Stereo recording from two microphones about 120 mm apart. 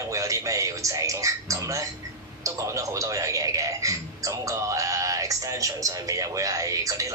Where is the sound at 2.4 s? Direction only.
25° right (ahead or behind).